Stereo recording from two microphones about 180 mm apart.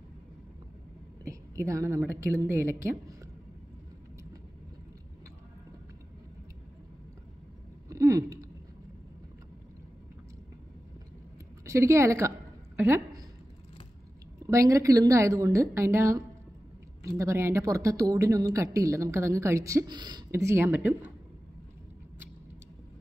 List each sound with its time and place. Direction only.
1.2 s a woman's voice: 15° right (ahead or behind)
7.9 s a sound: 20° right (ahead or behind)
11.6 s a woman's voice: 15° right (ahead or behind)
14.4 s a woman's voice: 15° right (ahead or behind)